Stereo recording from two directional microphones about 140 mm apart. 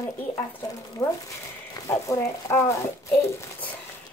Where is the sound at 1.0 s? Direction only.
20° left (ahead or behind).